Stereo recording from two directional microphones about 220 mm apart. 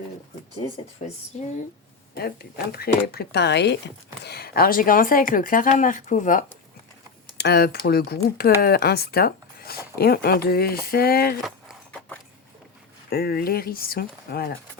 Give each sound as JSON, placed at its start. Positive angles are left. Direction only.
{"t": 0.6, "sound": "speech", "side_deg": 30}
{"t": 2.1, "sound": "speech", "side_deg": 45}
{"t": 7.3, "sound": "speech", "side_deg": 45}
{"t": 11.4, "sound": "a sound", "side_deg": 0}
{"t": 13.1, "sound": "speech", "side_deg": 45}